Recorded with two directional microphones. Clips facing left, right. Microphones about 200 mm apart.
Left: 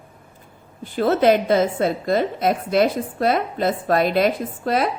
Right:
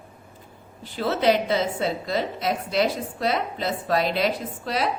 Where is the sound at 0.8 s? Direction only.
50° left (ahead or behind).